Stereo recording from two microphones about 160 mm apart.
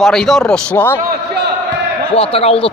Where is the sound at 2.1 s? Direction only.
35° left (ahead or behind).